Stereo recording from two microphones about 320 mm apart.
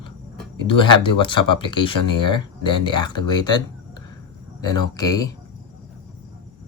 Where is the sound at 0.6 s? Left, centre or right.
Centre.